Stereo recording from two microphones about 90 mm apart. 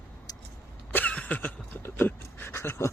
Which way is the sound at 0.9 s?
20° left (ahead or behind).